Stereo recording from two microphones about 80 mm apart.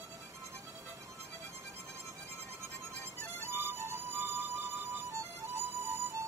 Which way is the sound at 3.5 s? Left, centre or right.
Right.